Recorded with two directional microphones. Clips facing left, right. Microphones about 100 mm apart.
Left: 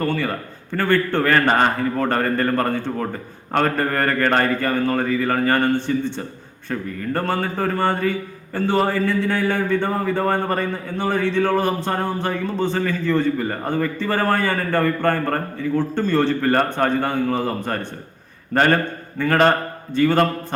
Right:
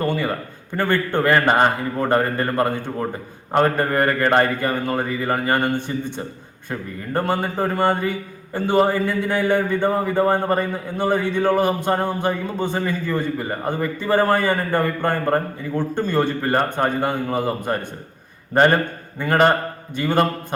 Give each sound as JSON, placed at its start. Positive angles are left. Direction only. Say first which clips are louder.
{"t": 0.0, "sound": "a man's voice", "louder": "even", "side_deg": -15}